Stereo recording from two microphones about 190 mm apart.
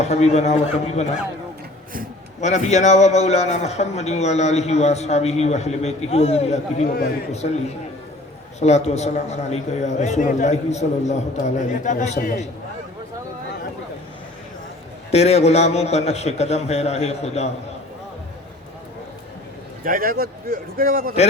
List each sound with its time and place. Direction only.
0.0 s a man's voice: 35° left (ahead or behind)
2.4 s a man's voice: 35° left (ahead or behind)
15.1 s a man's voice: 35° left (ahead or behind)
19.8 s a man's voice: 50° right (ahead or behind)